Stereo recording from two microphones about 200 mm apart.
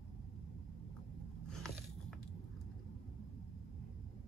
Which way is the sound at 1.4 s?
Centre (ahead or behind).